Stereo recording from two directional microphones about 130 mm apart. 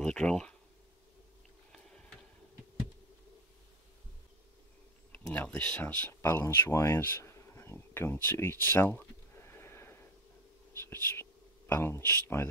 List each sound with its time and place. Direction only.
0.0 s a sound: 5° left (ahead or behind)
5.3 s speech: 10° left (ahead or behind)
10.8 s whispering: 20° left (ahead or behind)